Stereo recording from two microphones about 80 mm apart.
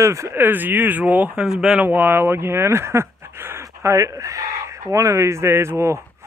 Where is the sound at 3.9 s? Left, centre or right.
Right.